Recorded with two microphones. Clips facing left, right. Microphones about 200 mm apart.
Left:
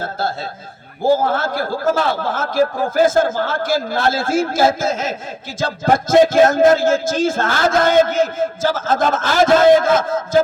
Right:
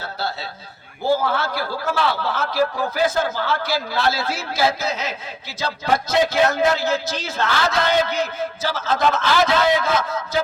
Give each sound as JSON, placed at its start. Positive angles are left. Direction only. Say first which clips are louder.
{"t": 0.0, "sound": "a man's voice", "louder": "left 5 dB", "side_deg": 50}